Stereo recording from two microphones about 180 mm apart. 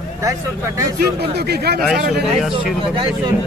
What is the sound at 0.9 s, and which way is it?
Speech, 65° right (ahead or behind).